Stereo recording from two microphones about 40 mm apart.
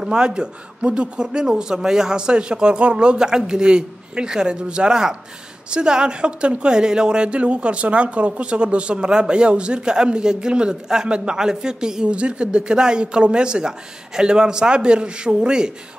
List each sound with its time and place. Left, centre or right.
0.0 s speech: right